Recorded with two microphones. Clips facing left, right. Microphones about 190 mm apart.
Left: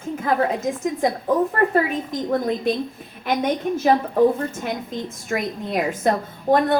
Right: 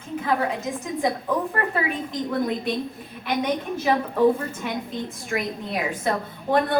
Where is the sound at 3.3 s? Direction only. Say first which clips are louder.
Left 3 dB; 45° left (ahead or behind).